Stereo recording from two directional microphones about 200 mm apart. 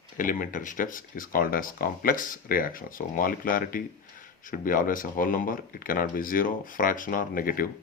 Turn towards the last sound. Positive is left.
turn(degrees=45)  # may be behind; listen again after turning